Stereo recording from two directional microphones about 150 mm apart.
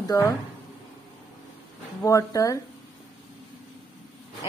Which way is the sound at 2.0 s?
20° left (ahead or behind).